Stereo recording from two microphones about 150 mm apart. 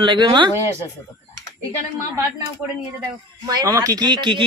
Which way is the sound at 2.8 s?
25° right (ahead or behind).